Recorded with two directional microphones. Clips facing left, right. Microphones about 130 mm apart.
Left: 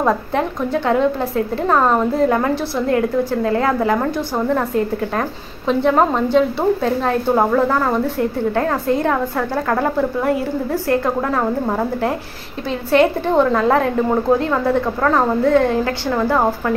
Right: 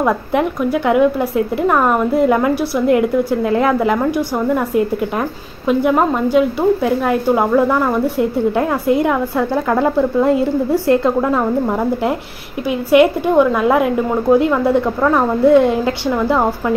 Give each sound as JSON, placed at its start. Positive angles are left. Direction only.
{"t": 0.3, "sound": "a woman's voice", "side_deg": -15}
{"t": 5.7, "sound": "a woman's voice", "side_deg": -10}
{"t": 12.9, "sound": "a woman's voice", "side_deg": -10}